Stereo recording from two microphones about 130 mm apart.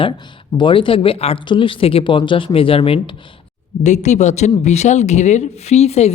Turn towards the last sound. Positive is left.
turn(degrees=55)  # may be behind; listen again after turning